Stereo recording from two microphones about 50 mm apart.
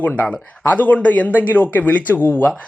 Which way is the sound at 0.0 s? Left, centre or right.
Left.